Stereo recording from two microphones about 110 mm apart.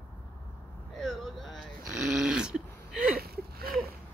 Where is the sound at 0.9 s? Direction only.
5° left (ahead or behind).